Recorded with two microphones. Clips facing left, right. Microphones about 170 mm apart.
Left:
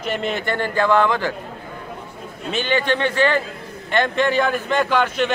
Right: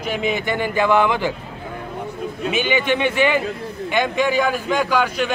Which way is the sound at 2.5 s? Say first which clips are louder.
Even; 10° right (ahead or behind).